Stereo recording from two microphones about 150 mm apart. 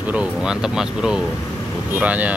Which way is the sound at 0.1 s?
5° right (ahead or behind).